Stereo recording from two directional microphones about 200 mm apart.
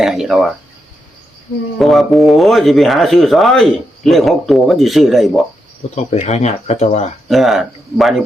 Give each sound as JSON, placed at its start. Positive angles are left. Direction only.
{"t": 0.0, "sound": "speech", "side_deg": 0}
{"t": 1.8, "sound": "speech", "side_deg": 0}
{"t": 5.9, "sound": "speech", "side_deg": 35}
{"t": 7.3, "sound": "speech", "side_deg": 0}